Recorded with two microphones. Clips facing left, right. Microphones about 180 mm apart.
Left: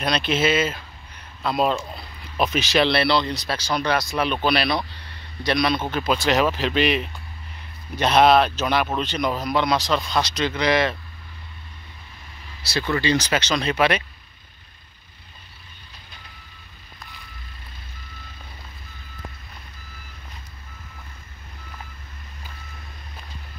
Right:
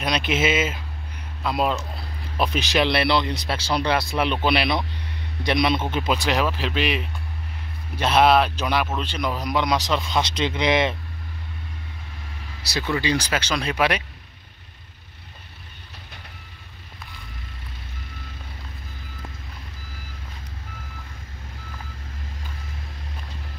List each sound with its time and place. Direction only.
0.0 s speech: 15° right (ahead or behind)
1.4 s speech: 5° right (ahead or behind); by 6.0 s 25° right (ahead or behind)
6.2 s speech: centre (ahead or behind); by 11.0 s 20° right (ahead or behind)
12.7 s speech: 10° right (ahead or behind)